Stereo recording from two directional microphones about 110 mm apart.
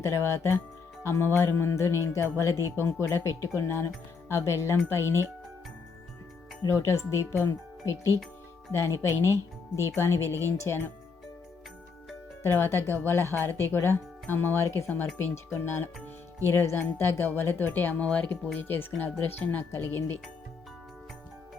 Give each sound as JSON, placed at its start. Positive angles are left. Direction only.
{"t": 0.0, "sound": "speech", "side_deg": 25}
{"t": 6.7, "sound": "speech", "side_deg": 25}
{"t": 12.4, "sound": "speech", "side_deg": 20}